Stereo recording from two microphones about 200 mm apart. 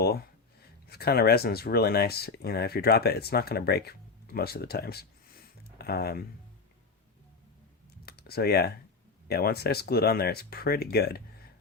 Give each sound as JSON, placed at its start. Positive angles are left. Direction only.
{"t": 0.9, "sound": "speech", "side_deg": 50}
{"t": 8.0, "sound": "computer keyboard", "side_deg": 50}
{"t": 9.2, "sound": "speech", "side_deg": 50}